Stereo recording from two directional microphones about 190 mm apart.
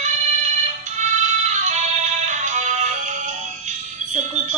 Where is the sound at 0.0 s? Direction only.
40° right (ahead or behind).